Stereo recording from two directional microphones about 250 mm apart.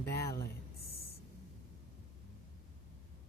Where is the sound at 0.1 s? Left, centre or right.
Left.